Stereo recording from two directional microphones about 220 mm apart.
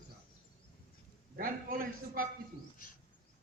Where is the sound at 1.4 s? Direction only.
40° right (ahead or behind).